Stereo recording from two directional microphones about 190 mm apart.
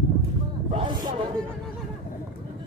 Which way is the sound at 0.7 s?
25° right (ahead or behind).